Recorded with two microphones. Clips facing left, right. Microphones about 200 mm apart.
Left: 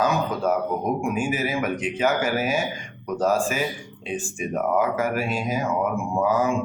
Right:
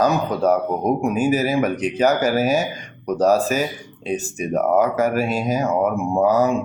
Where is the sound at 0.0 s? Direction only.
40° right (ahead or behind).